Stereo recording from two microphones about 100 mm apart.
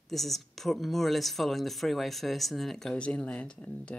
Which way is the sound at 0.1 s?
Centre (ahead or behind).